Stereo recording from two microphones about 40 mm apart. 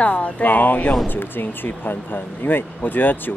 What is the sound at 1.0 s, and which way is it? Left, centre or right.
Speech, left.